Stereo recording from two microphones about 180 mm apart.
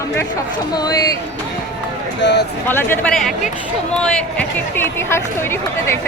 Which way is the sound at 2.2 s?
75° left (ahead or behind).